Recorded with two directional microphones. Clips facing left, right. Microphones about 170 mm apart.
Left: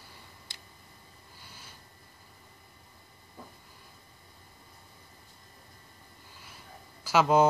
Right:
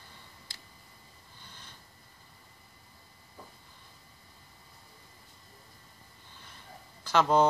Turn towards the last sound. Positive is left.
turn(degrees=5)  # may be behind; listen again after turning